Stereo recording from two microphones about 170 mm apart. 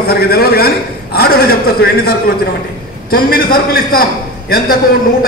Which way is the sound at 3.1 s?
60° left (ahead or behind).